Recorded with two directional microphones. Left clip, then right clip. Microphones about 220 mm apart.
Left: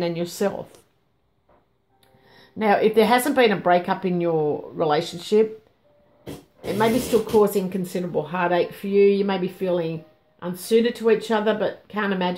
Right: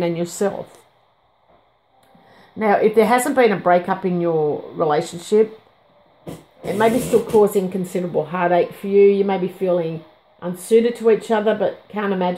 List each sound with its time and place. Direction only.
0.0 s speech: 5° right (ahead or behind)
2.3 s speech: centre (ahead or behind)
6.6 s speech: centre (ahead or behind)